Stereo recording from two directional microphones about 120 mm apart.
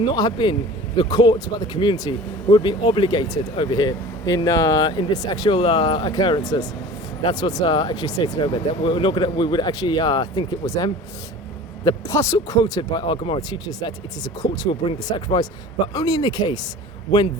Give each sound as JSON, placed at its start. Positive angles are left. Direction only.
{"t": 0.0, "sound": "speech", "side_deg": 35}